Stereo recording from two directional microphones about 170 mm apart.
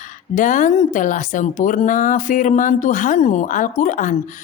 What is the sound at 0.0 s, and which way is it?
Speech, 50° left (ahead or behind).